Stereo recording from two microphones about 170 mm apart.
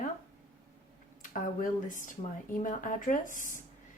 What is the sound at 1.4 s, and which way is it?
Speech, 55° left (ahead or behind).